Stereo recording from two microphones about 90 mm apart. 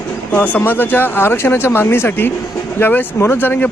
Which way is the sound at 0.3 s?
20° left (ahead or behind).